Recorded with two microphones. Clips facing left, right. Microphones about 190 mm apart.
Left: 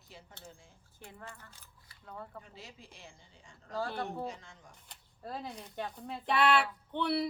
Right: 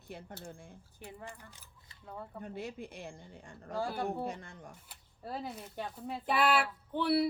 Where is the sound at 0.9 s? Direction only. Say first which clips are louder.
Right 2 dB; 15° right (ahead or behind).